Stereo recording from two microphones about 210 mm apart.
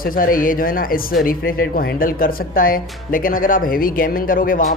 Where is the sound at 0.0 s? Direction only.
40° left (ahead or behind).